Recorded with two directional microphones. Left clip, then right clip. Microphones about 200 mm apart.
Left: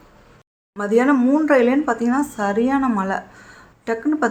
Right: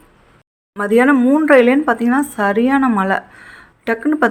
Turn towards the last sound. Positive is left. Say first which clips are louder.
# right 5 dB
turn(degrees=-25)  # may be behind; listen again after turning